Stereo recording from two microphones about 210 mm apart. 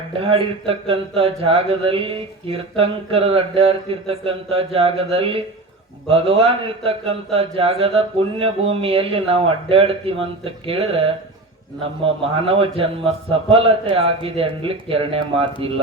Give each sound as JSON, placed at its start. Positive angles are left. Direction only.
{"t": 0.2, "sound": "speech", "side_deg": -25}